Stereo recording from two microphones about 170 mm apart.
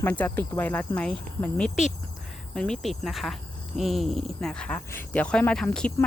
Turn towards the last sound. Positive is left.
turn(degrees=5)  # may be behind; listen again after turning